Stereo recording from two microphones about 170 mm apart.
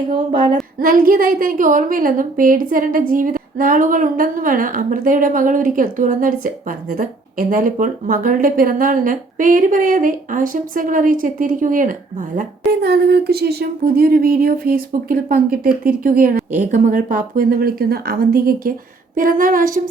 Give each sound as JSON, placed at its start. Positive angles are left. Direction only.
{"t": 0.1, "sound": "a woman's voice", "side_deg": -50}
{"t": 12.8, "sound": "a woman's voice", "side_deg": -70}